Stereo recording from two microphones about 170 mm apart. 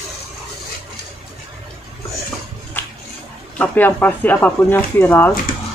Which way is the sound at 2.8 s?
10° left (ahead or behind).